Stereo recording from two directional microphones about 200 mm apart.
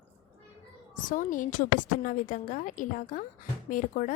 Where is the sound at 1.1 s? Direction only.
40° left (ahead or behind).